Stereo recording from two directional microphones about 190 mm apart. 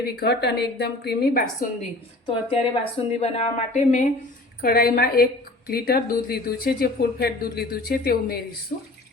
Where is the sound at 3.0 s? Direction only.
35° left (ahead or behind).